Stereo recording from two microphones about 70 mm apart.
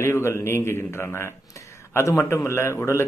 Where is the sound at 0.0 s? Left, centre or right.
Left.